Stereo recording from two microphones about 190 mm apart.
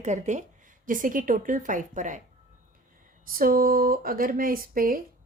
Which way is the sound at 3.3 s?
50° right (ahead or behind).